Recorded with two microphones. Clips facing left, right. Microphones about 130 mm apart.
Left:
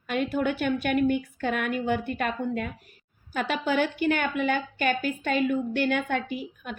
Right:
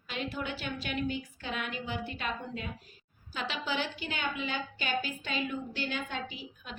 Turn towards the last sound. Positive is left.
turn(degrees=55)  # may be behind; listen again after turning